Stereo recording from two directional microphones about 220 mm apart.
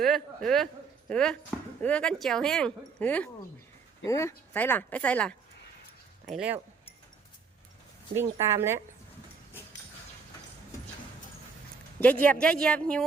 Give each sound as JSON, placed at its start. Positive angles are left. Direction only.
{"t": 0.0, "sound": "speech", "side_deg": 0}
{"t": 6.3, "sound": "speech", "side_deg": -5}
{"t": 8.1, "sound": "speech", "side_deg": -10}
{"t": 11.9, "sound": "speech", "side_deg": 5}